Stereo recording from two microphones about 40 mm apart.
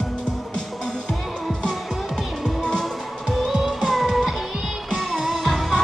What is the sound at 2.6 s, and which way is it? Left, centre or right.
Music, centre.